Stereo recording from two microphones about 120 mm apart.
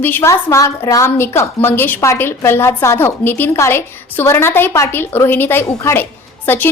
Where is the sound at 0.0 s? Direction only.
20° left (ahead or behind).